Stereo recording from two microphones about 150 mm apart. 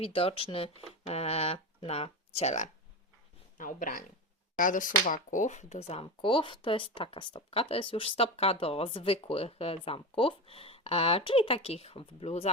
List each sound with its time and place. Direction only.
0.0 s speech: 40° left (ahead or behind)
3.6 s speech: 65° left (ahead or behind); by 12.5 s 40° left (ahead or behind)